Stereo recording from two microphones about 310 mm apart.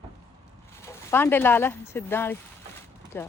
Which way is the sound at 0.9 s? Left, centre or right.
Centre.